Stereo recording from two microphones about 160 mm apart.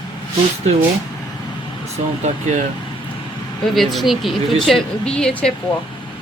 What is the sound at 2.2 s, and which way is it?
Speech, 50° right (ahead or behind).